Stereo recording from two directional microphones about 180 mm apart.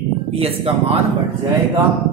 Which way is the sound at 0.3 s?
35° right (ahead or behind).